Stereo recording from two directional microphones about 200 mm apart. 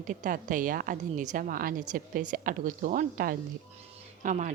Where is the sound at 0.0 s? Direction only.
40° right (ahead or behind).